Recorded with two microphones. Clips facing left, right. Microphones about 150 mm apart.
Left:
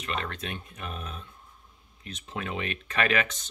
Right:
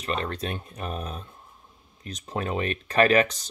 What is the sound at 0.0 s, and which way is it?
Speech, 35° right (ahead or behind).